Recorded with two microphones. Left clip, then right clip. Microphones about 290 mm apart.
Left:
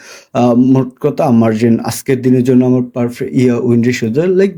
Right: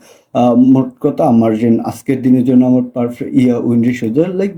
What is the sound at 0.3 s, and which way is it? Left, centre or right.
Speech, left.